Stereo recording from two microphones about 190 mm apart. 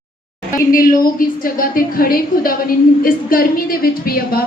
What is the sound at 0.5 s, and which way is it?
A woman's voice, 45° left (ahead or behind).